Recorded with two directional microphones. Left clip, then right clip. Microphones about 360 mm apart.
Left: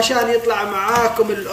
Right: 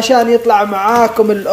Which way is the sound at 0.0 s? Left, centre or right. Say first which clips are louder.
Right 6 dB; centre.